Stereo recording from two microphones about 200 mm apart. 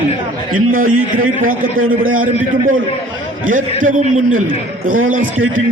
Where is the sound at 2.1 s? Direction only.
45° right (ahead or behind).